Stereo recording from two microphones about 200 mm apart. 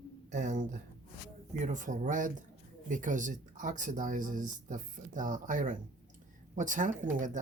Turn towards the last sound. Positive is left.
turn(degrees=-40)  # may be behind; listen again after turning